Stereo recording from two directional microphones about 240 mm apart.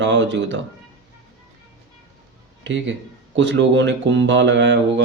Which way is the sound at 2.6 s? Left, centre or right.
Right.